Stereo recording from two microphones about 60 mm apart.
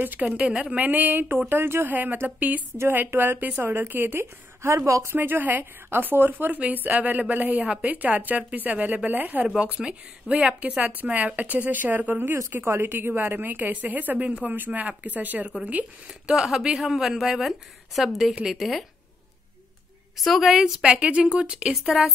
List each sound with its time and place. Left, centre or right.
0.4 s a woman's voice: centre; by 4.3 s right
4.6 s speech: right
5.1 s a woman's voice: right
9.6 s a woman's voice: centre
16.3 s a woman's voice: centre
20.2 s a woman's voice: centre